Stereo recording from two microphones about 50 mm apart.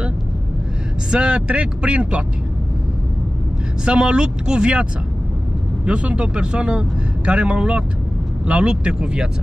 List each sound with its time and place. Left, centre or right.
1.1 s a man's voice: centre
3.8 s a man's voice: centre
5.9 s a man's voice: right